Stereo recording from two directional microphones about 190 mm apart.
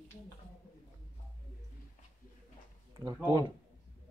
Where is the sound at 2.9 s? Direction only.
15° right (ahead or behind).